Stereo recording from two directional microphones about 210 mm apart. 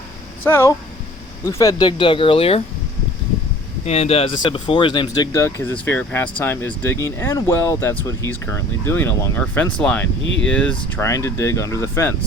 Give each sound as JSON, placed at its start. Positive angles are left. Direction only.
{"t": 0.4, "sound": "speech", "side_deg": 10}
{"t": 3.8, "sound": "speech", "side_deg": 30}